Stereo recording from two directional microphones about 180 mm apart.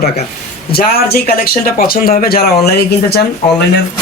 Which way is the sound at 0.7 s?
60° left (ahead or behind).